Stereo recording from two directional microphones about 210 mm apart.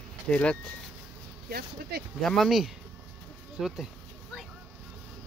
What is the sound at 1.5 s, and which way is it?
Speech, 50° right (ahead or behind).